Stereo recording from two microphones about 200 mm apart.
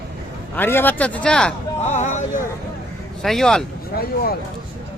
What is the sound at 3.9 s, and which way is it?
Speech, 50° left (ahead or behind).